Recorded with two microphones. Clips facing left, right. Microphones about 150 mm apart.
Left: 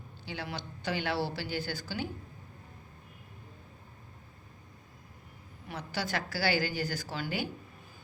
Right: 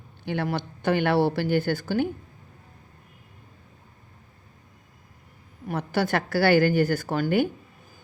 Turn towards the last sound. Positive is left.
turn(degrees=-55)  # may be behind; listen again after turning